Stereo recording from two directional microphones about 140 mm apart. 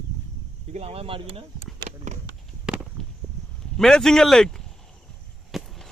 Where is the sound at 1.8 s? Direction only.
50° right (ahead or behind).